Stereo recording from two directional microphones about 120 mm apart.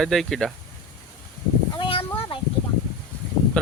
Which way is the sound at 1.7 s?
45° left (ahead or behind).